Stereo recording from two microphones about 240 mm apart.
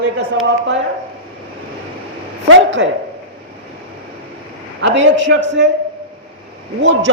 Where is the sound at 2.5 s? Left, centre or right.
Right.